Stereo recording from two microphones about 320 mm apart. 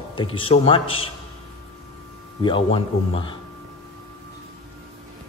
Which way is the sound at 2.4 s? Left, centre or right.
Centre.